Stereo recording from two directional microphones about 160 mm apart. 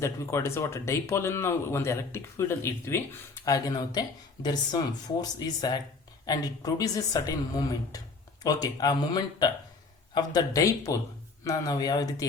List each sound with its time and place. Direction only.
0.0 s speech: 15° left (ahead or behind)